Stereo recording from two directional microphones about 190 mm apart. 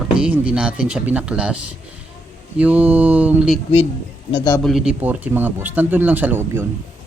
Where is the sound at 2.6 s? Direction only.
10° right (ahead or behind).